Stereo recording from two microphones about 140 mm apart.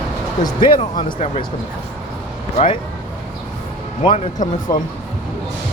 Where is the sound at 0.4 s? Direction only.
90° left.